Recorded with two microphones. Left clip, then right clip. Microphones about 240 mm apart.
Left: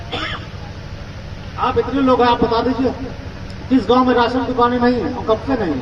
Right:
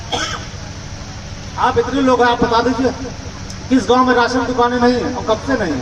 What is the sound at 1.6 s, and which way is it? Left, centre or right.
A man's voice, right.